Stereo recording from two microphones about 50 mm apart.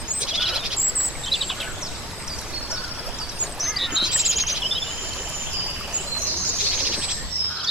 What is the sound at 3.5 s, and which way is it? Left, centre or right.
Duck, centre.